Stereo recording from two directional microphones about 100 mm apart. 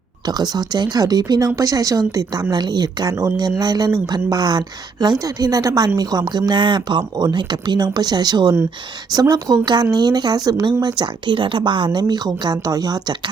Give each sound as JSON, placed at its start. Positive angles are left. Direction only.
{"t": 0.3, "sound": "speech", "side_deg": -45}